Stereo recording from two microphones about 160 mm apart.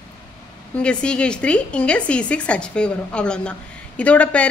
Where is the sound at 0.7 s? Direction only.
5° left (ahead or behind).